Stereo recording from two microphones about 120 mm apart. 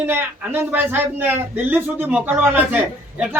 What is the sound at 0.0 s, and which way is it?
A man's voice, 15° right (ahead or behind).